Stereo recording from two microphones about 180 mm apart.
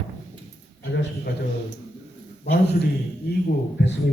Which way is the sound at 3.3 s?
70° left (ahead or behind).